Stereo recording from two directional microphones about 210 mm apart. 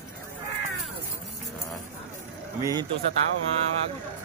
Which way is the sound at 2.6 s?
20° right (ahead or behind).